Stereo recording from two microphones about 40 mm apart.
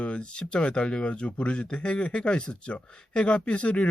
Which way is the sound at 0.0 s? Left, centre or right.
Left.